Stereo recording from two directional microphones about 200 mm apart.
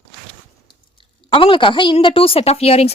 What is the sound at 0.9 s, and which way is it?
A woman's voice, 25° left (ahead or behind).